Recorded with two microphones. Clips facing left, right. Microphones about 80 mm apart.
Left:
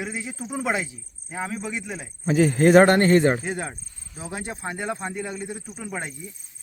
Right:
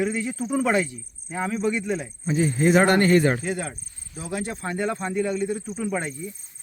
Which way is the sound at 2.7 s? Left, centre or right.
Left.